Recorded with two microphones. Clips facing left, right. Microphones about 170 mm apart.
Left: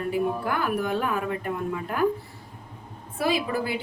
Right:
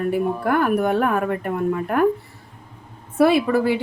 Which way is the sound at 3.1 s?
65° right (ahead or behind).